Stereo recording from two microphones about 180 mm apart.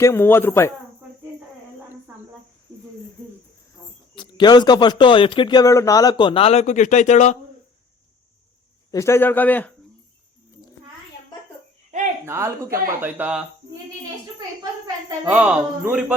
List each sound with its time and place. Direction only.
0.0 s speech: 15° left (ahead or behind)
4.1 s speech: 25° left (ahead or behind)
8.9 s speech: 15° left (ahead or behind)
12.2 s speech: 15° right (ahead or behind)
15.2 s speech: 5° right (ahead or behind)